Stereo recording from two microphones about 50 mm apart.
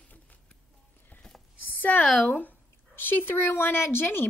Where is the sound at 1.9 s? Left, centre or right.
Left.